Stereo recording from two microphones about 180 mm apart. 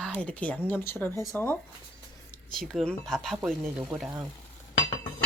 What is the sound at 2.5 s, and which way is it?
Speech, 5° left (ahead or behind).